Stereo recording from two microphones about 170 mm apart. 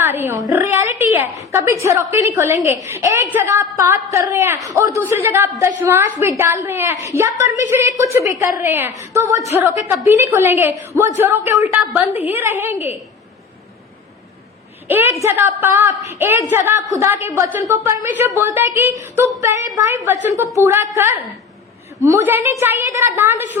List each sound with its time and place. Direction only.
0.0 s a woman's voice: 15° right (ahead or behind)
12.1 s a woman's voice: 40° left (ahead or behind)
12.4 s a woman's voice: 15° right (ahead or behind)
14.8 s a woman's voice: 10° right (ahead or behind)